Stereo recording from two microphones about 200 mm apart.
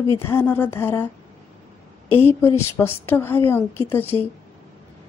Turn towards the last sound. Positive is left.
turn(degrees=10)  # may be behind; listen again after turning